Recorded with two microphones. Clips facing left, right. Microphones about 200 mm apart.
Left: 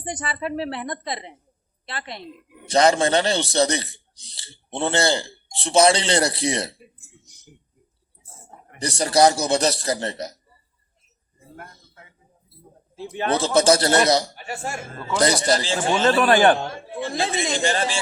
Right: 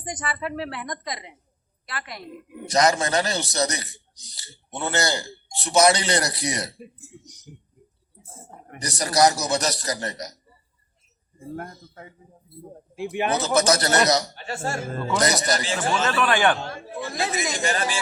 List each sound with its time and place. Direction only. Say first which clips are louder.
0.0 s a man's voice: left 2 dB; 30° left (ahead or behind)
7.5 s speech: right 4 dB; centre (ahead or behind)
8.8 s a man's voice: left 3 dB; 30° left (ahead or behind)
11.3 s a man's voice: right 9 dB; 45° right (ahead or behind)
13.0 s a man's voice: right 1 dB; 15° right (ahead or behind)
13.3 s a man's voice: left 4 dB; 30° left (ahead or behind)
14.3 s speech: right 1 dB; 15° left (ahead or behind)
15.1 s a man's voice: left 4 dB; 30° left (ahead or behind)
17.0 s a man's voice: left 3 dB; 25° left (ahead or behind)